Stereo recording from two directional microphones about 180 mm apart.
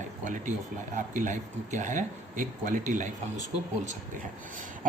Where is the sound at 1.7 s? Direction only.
45° right (ahead or behind).